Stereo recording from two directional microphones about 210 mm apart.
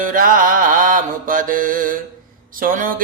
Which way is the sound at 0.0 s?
40° right (ahead or behind).